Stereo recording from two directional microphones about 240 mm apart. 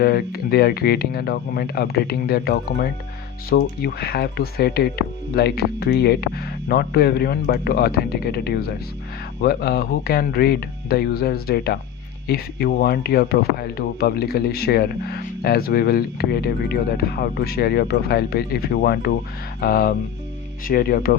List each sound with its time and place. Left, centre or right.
0.0 s speech: left